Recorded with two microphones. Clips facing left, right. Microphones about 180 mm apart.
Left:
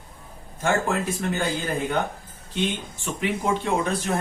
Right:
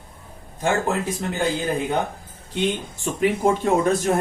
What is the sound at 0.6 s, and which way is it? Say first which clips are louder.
Speech: right 1 dB; 15° right (ahead or behind).